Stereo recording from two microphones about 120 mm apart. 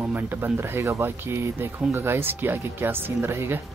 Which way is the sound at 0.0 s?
15° right (ahead or behind).